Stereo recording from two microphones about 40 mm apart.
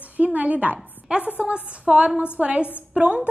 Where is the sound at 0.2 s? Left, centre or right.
Right.